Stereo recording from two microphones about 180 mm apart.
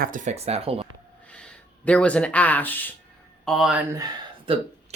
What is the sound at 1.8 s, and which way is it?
Speech, 5° left (ahead or behind).